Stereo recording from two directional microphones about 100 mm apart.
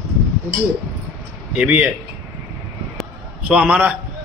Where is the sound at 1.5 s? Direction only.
15° right (ahead or behind).